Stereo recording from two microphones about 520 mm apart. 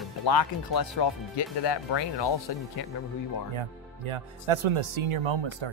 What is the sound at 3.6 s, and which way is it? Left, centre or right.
Speech, right.